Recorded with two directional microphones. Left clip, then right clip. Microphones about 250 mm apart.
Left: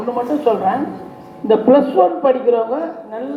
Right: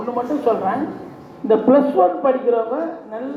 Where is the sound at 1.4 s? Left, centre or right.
Left.